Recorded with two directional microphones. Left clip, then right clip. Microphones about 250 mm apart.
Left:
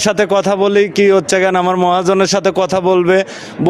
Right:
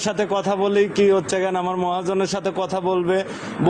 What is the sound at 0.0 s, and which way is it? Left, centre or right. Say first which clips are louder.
A man's voice: left 9 dB; left.